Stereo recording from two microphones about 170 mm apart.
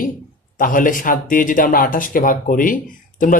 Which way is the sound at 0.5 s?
50° left (ahead or behind).